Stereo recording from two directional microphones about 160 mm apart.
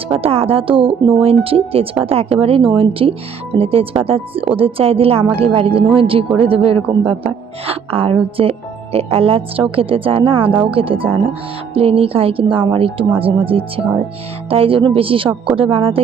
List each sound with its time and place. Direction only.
0.1 s a woman's voice: 35° right (ahead or behind)
10.5 s speech: 10° right (ahead or behind)
10.8 s a woman's voice: 35° right (ahead or behind)